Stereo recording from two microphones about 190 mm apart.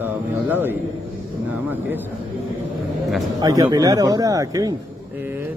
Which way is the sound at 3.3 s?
20° right (ahead or behind).